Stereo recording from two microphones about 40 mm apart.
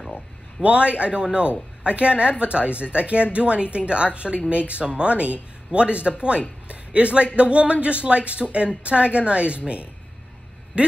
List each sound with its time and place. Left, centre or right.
0.1 s speech: right
10.8 s speech: right